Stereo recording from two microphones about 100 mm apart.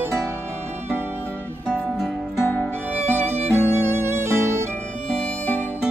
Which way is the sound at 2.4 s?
20° left (ahead or behind).